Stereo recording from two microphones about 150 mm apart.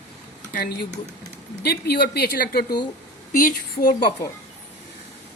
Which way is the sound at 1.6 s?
90° left.